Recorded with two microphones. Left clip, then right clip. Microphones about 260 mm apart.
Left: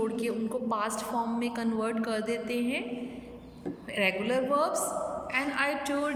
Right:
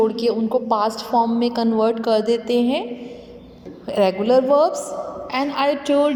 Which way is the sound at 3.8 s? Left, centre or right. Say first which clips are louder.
Right 11 dB; right.